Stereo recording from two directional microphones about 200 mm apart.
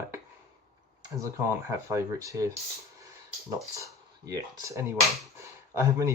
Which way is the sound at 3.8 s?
15° right (ahead or behind).